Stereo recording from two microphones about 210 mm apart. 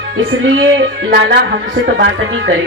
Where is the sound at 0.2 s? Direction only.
60° right (ahead or behind).